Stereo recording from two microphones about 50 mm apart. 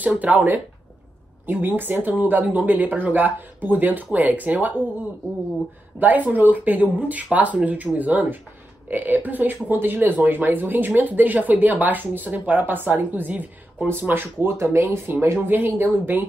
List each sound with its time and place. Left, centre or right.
0.2 s speech: right
5.9 s speech: right
14.4 s speech: right
15.4 s speech: right